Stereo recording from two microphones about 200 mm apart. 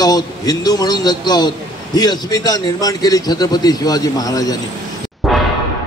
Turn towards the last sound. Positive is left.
turn(degrees=0)  # may be behind; listen again after turning